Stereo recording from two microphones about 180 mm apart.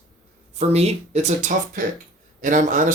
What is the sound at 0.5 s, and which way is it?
Speech, 35° right (ahead or behind).